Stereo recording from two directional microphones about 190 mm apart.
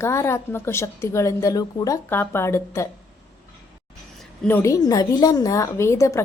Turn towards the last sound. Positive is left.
turn(degrees=15)  # may be behind; listen again after turning